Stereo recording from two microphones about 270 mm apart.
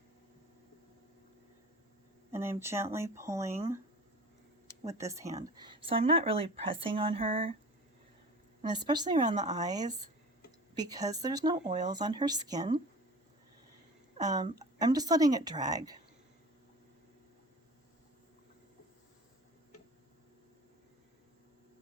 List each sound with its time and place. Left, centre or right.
2.3 s speech: centre
4.8 s speech: centre
8.6 s speech: centre
9.6 s speech: centre
14.2 s speech: centre